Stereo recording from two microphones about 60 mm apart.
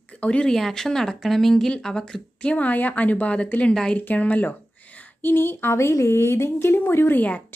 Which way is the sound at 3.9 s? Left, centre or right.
Left.